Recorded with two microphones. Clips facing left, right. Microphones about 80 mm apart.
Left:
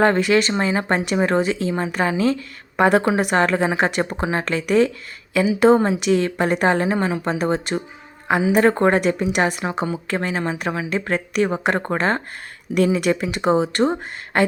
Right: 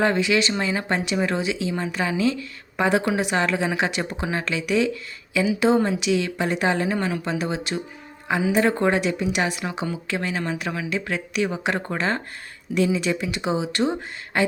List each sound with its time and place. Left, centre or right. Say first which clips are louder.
0.0 s speech: left 4 dB; left
12.7 s speech: left 4 dB; left